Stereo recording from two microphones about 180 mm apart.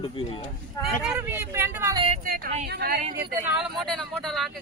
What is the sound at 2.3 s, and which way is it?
Speech, 55° right (ahead or behind).